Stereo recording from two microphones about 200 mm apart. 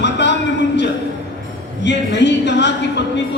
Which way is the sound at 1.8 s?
60° left (ahead or behind).